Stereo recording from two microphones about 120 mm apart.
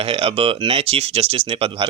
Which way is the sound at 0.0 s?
55° right (ahead or behind).